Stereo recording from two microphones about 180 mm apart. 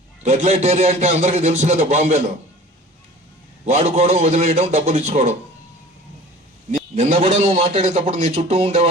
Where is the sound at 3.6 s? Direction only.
40° right (ahead or behind).